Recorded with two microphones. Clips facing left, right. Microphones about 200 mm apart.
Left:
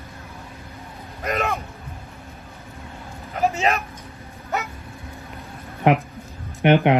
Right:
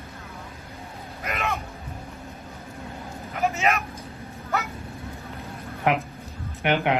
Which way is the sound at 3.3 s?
30° left (ahead or behind).